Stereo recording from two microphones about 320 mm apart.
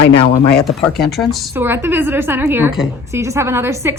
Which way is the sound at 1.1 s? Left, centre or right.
Centre.